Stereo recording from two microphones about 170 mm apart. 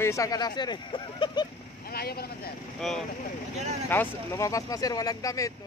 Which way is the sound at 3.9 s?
15° left (ahead or behind).